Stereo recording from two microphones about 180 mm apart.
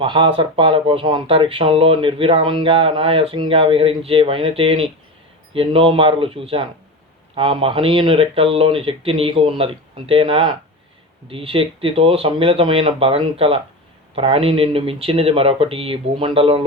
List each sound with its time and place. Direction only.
0.0 s speech: 30° right (ahead or behind)